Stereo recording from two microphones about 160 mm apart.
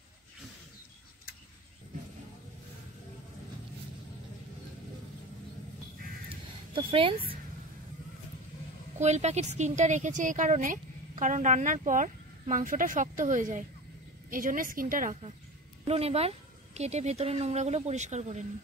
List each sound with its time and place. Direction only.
6.7 s speech: 35° right (ahead or behind)
8.9 s a woman's voice: 45° right (ahead or behind)
15.9 s speech: 40° right (ahead or behind)